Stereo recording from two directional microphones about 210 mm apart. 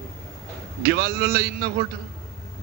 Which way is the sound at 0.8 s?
50° right (ahead or behind).